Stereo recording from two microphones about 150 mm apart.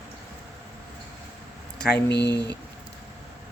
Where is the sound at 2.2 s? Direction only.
25° right (ahead or behind).